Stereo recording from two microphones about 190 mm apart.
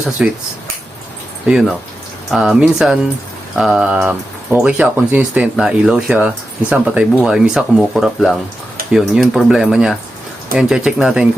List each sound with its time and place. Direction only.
0.2 s speech: 5° right (ahead or behind)
1.5 s speech: 5° right (ahead or behind)